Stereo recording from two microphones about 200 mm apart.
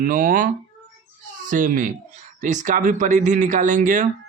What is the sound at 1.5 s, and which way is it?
Speech, 40° right (ahead or behind).